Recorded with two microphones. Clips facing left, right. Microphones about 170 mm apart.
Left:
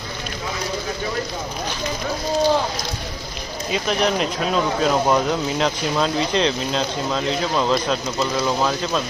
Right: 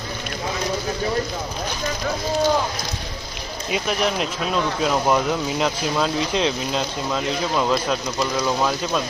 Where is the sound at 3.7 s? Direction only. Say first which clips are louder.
Left 2 dB; 5° right (ahead or behind).